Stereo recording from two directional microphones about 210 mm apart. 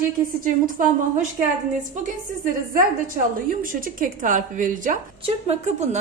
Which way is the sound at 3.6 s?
40° right (ahead or behind).